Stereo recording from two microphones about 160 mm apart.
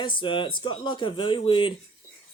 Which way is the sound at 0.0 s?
30° left (ahead or behind).